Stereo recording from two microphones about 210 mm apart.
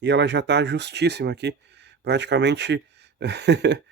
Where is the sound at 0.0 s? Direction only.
55° right (ahead or behind).